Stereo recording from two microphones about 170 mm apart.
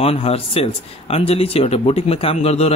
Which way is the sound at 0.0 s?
35° left (ahead or behind).